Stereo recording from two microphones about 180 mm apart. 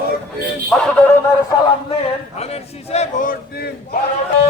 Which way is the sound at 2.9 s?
35° left (ahead or behind).